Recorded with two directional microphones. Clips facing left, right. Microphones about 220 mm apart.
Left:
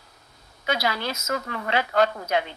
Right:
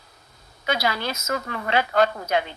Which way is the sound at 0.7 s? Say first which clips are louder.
Right 1 dB; 50° right (ahead or behind).